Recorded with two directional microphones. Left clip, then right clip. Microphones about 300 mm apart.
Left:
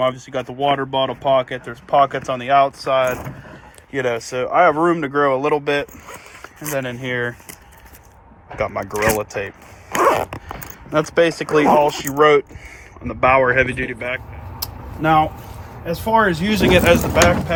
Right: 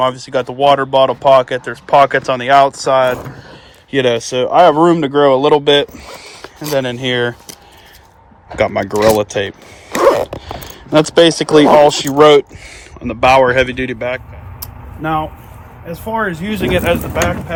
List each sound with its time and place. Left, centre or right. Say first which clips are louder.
0.3 s speech: right 8 dB; centre
8.5 s speech: right 8 dB; right
14.6 s a sound: left 2 dB; centre
15.9 s speech: left 3 dB; centre